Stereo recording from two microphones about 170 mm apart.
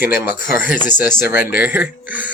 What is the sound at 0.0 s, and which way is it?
Speech, 10° right (ahead or behind).